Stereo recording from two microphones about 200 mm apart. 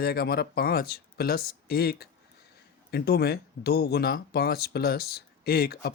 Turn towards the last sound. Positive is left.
turn(degrees=50)  # may be behind; listen again after turning